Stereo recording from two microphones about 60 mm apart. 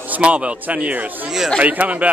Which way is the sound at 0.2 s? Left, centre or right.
Right.